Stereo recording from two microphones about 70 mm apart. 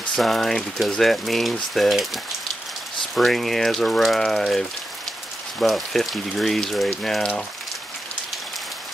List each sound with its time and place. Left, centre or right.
0.2 s speech: centre
3.2 s speech: centre